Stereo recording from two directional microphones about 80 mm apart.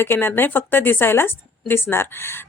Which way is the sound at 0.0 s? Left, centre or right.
Left.